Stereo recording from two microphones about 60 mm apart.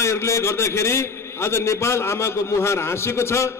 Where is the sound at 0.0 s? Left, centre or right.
Left.